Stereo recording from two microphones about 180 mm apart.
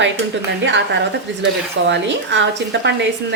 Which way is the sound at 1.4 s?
85° right.